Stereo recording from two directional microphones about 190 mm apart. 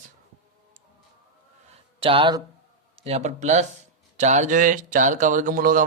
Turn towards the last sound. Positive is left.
turn(degrees=-45)  # may be behind; listen again after turning